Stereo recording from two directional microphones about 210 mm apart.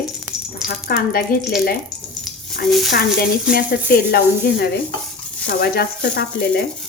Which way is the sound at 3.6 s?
50° left (ahead or behind).